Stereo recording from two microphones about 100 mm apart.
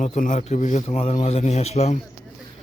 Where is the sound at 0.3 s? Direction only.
90° left.